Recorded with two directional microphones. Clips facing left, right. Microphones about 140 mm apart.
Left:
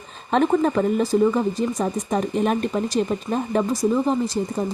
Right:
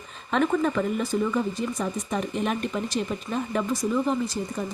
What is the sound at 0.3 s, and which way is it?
A woman's voice, 35° left (ahead or behind).